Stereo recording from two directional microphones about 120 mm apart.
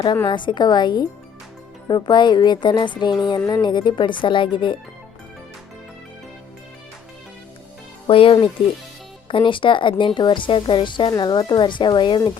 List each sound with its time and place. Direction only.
0.3 s speech: 40° left (ahead or behind)
8.0 s a woman's voice: 50° left (ahead or behind)